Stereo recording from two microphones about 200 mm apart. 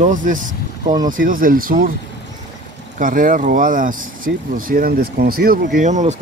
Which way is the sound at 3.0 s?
45° right (ahead or behind).